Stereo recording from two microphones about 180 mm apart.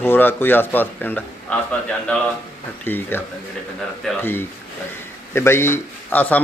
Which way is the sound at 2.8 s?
10° left (ahead or behind).